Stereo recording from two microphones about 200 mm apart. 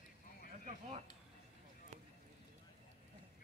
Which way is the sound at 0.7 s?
30° right (ahead or behind).